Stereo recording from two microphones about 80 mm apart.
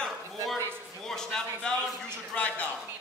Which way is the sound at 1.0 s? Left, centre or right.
Centre.